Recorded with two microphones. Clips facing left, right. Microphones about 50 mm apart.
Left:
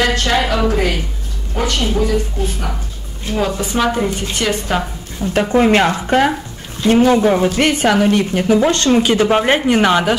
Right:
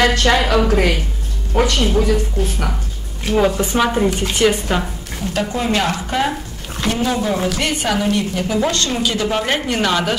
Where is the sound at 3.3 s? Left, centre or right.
Centre.